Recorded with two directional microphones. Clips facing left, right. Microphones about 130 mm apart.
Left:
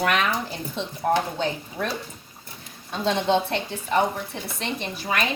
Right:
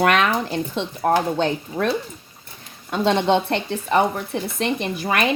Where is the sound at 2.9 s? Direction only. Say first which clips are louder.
Right 4 dB; 65° right (ahead or behind).